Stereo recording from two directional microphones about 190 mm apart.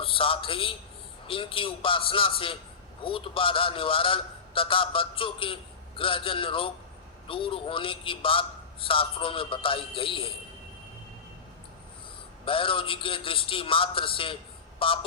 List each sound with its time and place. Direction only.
0.0 s a man's voice: 30° left (ahead or behind)
12.5 s a man's voice: 30° left (ahead or behind)